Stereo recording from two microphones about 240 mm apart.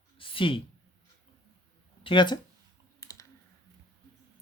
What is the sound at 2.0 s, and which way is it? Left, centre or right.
Speech, centre.